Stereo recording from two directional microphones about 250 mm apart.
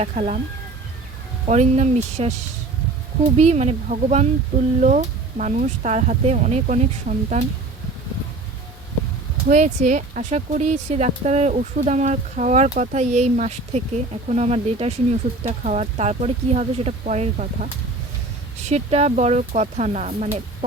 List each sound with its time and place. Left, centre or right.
0.0 s speech: right
1.5 s speech: right
3.3 s speech: right
9.5 s speech: right
18.7 s speech: right